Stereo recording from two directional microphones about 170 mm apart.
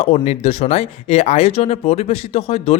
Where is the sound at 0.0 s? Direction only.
40° left (ahead or behind).